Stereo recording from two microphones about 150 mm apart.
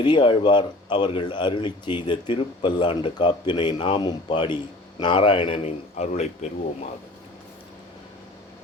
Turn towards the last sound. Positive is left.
turn(degrees=45)  # may be behind; listen again after turning